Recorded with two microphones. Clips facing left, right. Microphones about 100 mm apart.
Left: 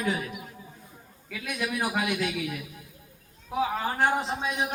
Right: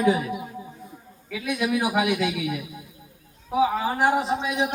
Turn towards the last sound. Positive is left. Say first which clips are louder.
# right 5 dB
turn(degrees=-10)  # may be behind; listen again after turning